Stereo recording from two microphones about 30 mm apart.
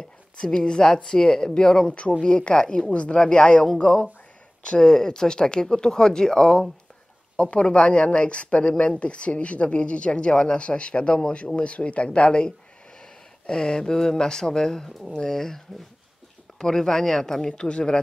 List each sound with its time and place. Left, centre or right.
0.6 s speech: left
2.9 s speech: left
3.2 s speech: left
7.7 s speech: left; by 17.5 s centre
17.5 s speech: left